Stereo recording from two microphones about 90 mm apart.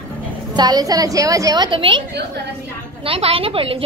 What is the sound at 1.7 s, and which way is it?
Speech, 70° right (ahead or behind).